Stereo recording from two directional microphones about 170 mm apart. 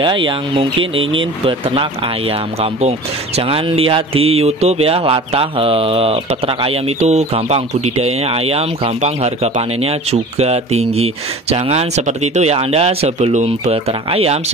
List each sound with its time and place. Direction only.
0.0 s speech: 30° right (ahead or behind)